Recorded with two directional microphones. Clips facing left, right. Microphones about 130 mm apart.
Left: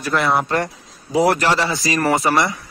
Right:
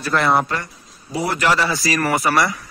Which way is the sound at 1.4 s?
30° left (ahead or behind).